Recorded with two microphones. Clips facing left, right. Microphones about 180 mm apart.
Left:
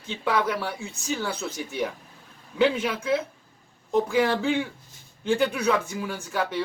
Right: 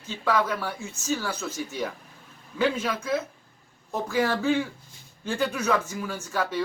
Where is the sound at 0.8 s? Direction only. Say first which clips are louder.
Right 1 dB; 15° left (ahead or behind).